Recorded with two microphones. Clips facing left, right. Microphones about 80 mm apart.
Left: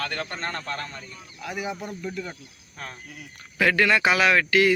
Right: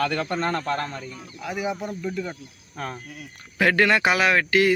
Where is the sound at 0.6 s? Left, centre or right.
Right.